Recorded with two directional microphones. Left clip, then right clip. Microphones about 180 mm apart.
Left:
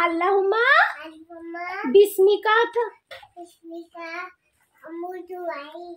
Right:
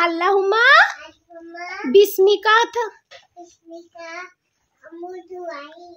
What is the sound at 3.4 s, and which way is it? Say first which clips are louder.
Speech: right 1 dB; 10° left (ahead or behind).